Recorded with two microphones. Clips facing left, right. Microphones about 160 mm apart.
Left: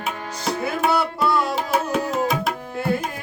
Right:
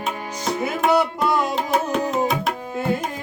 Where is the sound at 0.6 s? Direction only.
15° right (ahead or behind).